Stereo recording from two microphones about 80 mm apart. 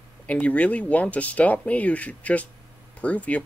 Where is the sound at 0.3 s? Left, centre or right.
Centre.